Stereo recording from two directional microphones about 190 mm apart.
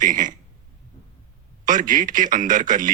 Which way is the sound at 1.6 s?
45° right (ahead or behind).